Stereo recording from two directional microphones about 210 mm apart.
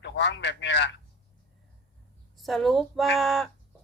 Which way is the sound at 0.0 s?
55° left (ahead or behind).